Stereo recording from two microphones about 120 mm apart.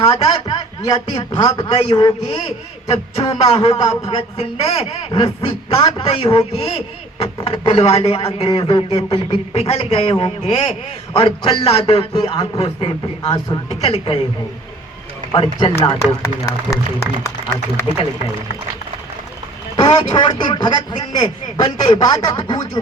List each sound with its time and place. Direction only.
0.1 s a man's voice: 45° left (ahead or behind)
2.3 s a man's voice: 50° left (ahead or behind)
8.6 s a man's voice: 40° left (ahead or behind)
9.0 s a man's voice: 50° left (ahead or behind)
13.7 s a man's voice: 55° left (ahead or behind)
15.3 s a man's voice: 45° left (ahead or behind)
16.2 s speech: 25° left (ahead or behind)
19.7 s a man's voice: 35° left (ahead or behind)